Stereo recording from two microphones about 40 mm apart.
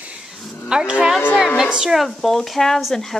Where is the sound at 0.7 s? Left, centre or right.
Right.